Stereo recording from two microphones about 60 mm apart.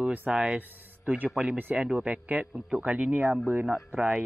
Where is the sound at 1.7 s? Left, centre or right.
Centre; by 3.7 s right.